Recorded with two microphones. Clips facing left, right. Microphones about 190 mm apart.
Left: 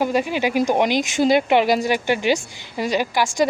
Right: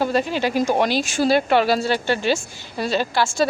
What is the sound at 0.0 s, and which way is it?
Speech, 15° left (ahead or behind).